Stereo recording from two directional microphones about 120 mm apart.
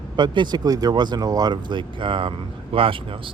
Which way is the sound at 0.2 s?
35° right (ahead or behind).